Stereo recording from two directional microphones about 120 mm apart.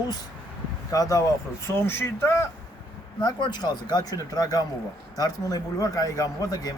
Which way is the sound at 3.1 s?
35° left (ahead or behind).